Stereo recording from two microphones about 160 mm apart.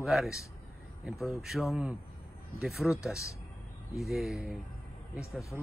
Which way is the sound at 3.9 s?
Centre (ahead or behind).